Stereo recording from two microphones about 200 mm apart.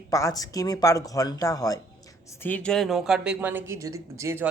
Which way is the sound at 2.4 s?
5° left (ahead or behind).